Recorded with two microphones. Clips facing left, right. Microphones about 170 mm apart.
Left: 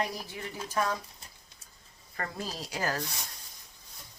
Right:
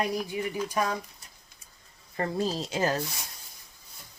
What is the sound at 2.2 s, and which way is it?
Speech, 25° right (ahead or behind).